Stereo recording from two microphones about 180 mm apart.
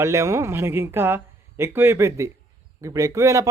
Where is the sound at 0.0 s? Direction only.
15° right (ahead or behind).